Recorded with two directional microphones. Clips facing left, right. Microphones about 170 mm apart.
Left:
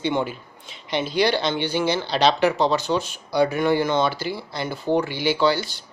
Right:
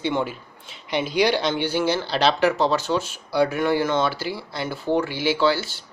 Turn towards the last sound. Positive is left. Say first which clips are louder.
# even
turn(degrees=-5)  # may be behind; listen again after turning